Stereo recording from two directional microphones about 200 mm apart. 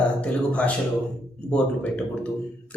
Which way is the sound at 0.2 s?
5° left (ahead or behind).